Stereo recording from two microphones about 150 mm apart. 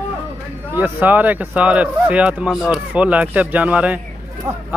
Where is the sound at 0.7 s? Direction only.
10° right (ahead or behind).